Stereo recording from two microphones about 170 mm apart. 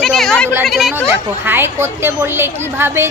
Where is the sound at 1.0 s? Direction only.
15° right (ahead or behind).